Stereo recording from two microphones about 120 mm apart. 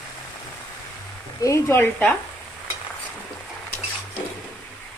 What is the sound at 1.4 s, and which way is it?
Speech, 25° left (ahead or behind).